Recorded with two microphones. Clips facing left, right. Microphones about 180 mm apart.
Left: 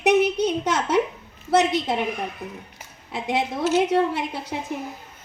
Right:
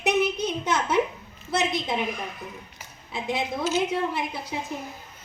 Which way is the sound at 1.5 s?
75° left (ahead or behind).